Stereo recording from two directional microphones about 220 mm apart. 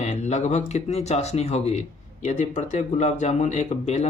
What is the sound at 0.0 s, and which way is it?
Speech, 30° left (ahead or behind).